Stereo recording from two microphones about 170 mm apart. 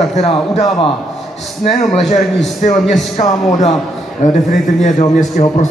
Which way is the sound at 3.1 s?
40° left (ahead or behind).